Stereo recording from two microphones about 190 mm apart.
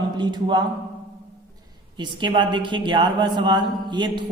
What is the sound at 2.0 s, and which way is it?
A man's voice, 25° right (ahead or behind).